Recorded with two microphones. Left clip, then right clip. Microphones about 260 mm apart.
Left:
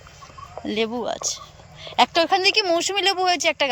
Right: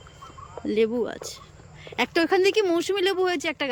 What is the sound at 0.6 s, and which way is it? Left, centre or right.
Speech, centre.